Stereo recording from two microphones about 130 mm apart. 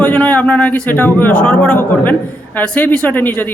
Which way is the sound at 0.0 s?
10° left (ahead or behind).